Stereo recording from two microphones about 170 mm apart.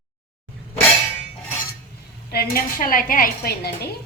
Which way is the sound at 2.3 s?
65° left (ahead or behind).